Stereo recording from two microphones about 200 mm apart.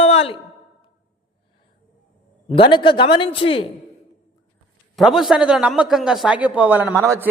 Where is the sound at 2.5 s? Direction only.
25° left (ahead or behind).